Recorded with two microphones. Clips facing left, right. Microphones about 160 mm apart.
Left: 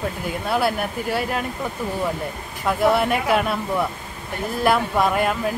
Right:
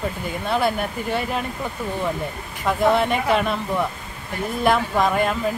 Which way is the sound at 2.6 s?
5° left (ahead or behind).